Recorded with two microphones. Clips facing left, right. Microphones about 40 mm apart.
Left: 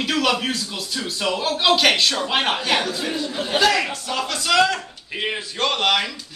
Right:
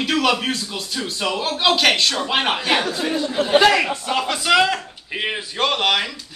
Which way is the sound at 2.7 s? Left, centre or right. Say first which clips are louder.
Right 2 dB; centre.